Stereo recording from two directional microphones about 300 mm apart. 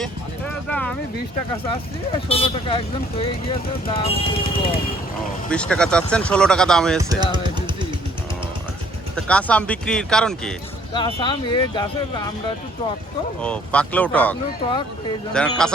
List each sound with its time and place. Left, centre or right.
0.0 s vehicle: centre
1.7 s speech: centre
5.5 s speech: centre
7.0 s speech: centre
9.1 s speech: centre
10.9 s speech: centre
13.4 s speech: centre